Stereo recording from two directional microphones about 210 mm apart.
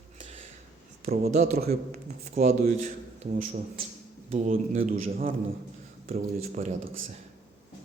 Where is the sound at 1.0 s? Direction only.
45° right (ahead or behind).